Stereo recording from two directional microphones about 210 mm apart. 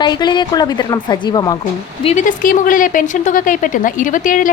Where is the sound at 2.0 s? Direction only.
30° left (ahead or behind).